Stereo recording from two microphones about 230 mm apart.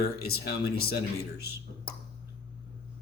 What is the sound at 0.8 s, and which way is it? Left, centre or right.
Speech, left.